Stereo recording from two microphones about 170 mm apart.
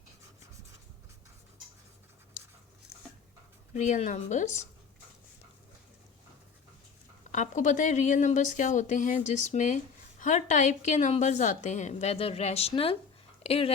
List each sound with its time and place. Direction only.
3.8 s a woman's voice: 45° left (ahead or behind)
7.3 s a woman's voice: 45° left (ahead or behind)